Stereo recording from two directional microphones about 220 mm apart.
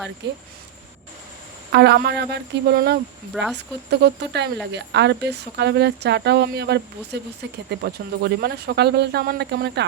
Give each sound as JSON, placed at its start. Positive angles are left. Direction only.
{"t": 1.7, "sound": "speech", "side_deg": -50}
{"t": 3.3, "sound": "speech", "side_deg": -5}
{"t": 3.8, "sound": "speech", "side_deg": -50}